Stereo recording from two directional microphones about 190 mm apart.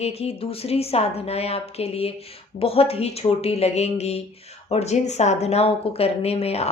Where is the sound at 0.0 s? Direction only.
35° left (ahead or behind).